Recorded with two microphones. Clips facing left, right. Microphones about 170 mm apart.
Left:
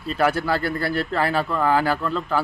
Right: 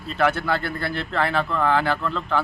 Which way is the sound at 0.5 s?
40° left (ahead or behind).